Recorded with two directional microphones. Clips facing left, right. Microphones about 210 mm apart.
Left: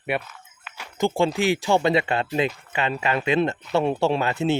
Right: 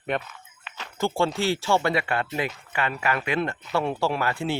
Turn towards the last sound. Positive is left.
turn(degrees=20)  # may be behind; listen again after turning